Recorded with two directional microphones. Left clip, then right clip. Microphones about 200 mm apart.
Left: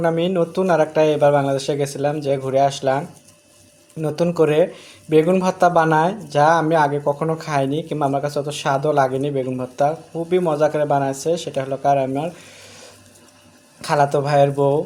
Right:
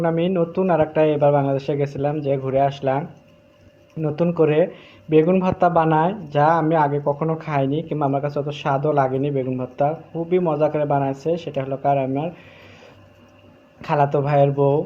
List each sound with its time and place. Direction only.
0.0 s speech: 20° left (ahead or behind)
4.2 s speech: 15° left (ahead or behind)
13.8 s speech: 15° left (ahead or behind)